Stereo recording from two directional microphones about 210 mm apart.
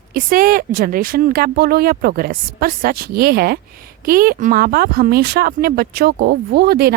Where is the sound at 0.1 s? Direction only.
45° right (ahead or behind).